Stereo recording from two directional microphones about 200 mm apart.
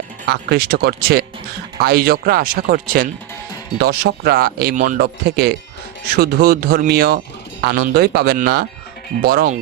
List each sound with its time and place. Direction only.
0.3 s speech: 50° right (ahead or behind)